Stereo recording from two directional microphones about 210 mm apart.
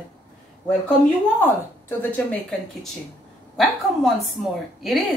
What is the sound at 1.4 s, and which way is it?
Speech, 10° left (ahead or behind).